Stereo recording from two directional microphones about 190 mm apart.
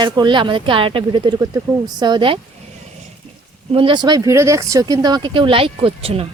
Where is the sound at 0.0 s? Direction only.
25° right (ahead or behind).